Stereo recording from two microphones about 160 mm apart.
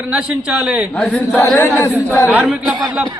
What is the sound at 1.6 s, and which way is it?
Speech, 15° left (ahead or behind).